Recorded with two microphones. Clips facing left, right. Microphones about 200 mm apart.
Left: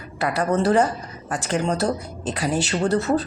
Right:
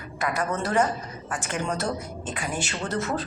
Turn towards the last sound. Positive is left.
turn(degrees=35)  # may be behind; listen again after turning